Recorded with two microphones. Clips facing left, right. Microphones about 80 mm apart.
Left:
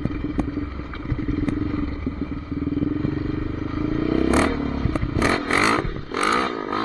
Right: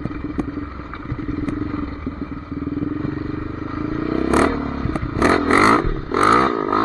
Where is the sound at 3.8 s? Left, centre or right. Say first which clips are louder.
Even; right.